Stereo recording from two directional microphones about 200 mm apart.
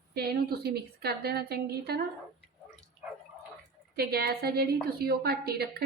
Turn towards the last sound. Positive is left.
turn(degrees=-50)  # may be behind; listen again after turning